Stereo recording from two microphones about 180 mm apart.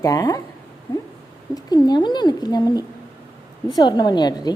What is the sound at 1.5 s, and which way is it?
A woman's voice, 20° left (ahead or behind).